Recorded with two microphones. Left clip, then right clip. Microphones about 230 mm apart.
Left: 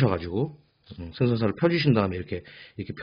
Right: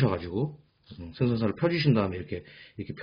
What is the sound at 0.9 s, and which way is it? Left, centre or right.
A man's voice, left.